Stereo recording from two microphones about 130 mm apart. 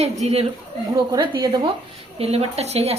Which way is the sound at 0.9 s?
35° right (ahead or behind).